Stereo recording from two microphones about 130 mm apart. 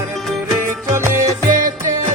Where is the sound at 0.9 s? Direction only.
20° right (ahead or behind).